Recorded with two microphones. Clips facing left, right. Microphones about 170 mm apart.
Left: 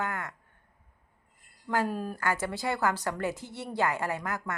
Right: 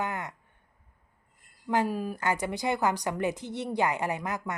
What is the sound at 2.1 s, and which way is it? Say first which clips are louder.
A woman's voice: right 1 dB; 20° right (ahead or behind).